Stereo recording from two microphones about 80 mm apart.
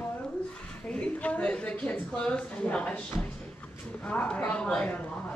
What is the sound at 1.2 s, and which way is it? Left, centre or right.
Speech, centre.